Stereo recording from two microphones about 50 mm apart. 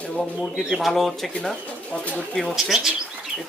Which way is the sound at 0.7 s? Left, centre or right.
Centre.